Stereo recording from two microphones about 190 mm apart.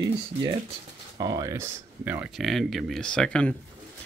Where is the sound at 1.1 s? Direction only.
20° right (ahead or behind); by 3.5 s 5° left (ahead or behind).